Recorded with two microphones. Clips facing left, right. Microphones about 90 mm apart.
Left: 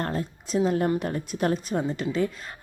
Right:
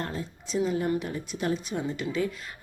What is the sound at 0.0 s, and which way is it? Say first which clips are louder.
A woman's voice: left 5 dB; 50° left (ahead or behind).